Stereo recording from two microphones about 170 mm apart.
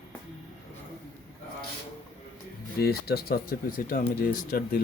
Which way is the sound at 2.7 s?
65° left (ahead or behind).